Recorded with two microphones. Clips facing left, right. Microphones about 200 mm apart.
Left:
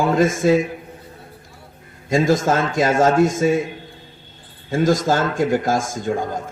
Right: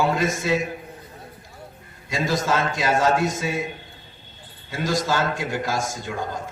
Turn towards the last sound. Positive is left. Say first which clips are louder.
# left 7 dB
turn(degrees=50)  # may be behind; listen again after turning